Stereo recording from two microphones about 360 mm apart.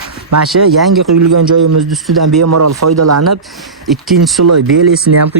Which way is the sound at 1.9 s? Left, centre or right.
Centre.